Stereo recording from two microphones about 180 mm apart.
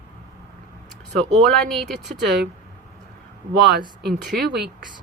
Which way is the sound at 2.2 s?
70° right (ahead or behind).